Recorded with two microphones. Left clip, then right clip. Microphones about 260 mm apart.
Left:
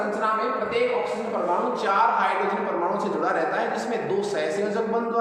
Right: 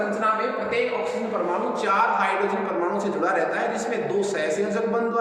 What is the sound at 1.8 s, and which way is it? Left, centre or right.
Speech, centre.